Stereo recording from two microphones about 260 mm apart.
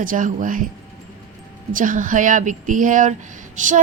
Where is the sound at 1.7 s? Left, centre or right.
Right.